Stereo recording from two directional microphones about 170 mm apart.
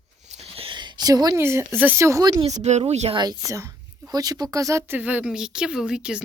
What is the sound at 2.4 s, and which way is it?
Speech, 40° right (ahead or behind).